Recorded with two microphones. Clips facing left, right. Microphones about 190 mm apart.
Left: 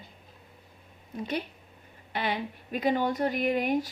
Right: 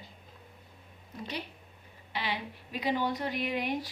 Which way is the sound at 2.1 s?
50° left (ahead or behind).